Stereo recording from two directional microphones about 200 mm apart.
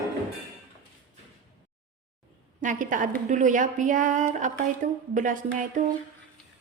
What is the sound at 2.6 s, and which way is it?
A woman's voice, 40° right (ahead or behind).